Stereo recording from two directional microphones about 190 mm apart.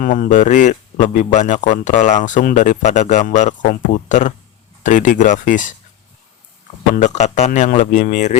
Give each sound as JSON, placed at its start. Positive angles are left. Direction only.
{"t": 0.0, "sound": "a man's voice", "side_deg": 45}
{"t": 6.9, "sound": "a man's voice", "side_deg": 40}